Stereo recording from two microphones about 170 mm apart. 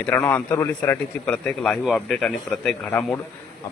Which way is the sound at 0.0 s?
10° left (ahead or behind).